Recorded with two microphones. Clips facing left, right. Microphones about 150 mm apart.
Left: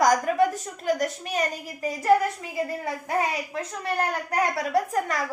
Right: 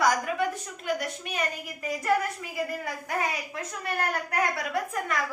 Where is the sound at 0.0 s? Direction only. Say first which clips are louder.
Left 5 dB; 45° left (ahead or behind).